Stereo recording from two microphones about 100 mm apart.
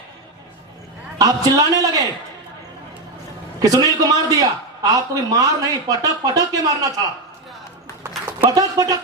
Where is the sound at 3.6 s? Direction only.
35° right (ahead or behind).